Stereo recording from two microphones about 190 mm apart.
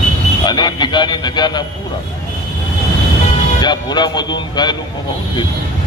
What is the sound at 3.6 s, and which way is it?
A man's voice, 20° left (ahead or behind).